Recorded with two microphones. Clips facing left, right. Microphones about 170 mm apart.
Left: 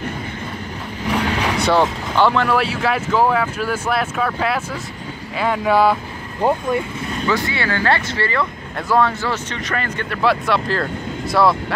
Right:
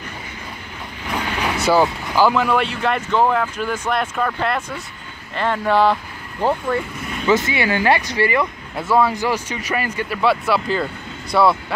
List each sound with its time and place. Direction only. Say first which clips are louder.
1.6 s speech: right 2 dB; 5° right (ahead or behind); by 6.9 s 15° left (ahead or behind)
7.2 s speech: right 4 dB; 20° right (ahead or behind)
8.7 s speech: even; 5° right (ahead or behind)